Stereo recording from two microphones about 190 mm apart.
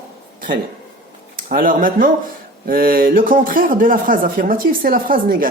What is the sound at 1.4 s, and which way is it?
Speech, 45° right (ahead or behind).